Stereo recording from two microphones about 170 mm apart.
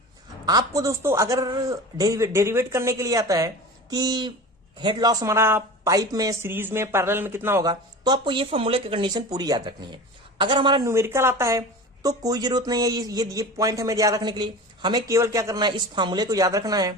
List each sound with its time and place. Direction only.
0.4 s speech: 20° right (ahead or behind)
10.8 s speech: 15° right (ahead or behind)